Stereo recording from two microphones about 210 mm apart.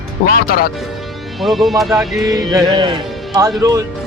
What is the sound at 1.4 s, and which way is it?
Speech, centre (ahead or behind).